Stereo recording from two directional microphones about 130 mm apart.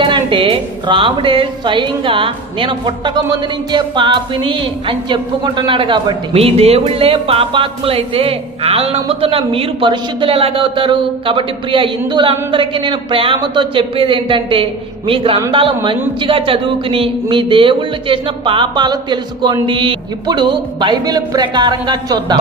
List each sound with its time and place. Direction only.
0.0 s music: 40° right (ahead or behind)